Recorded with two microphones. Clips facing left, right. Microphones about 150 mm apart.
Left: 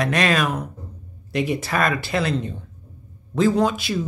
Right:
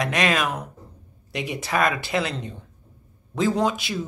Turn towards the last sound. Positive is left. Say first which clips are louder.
# left 3 dB
turn(degrees=-20)  # may be behind; listen again after turning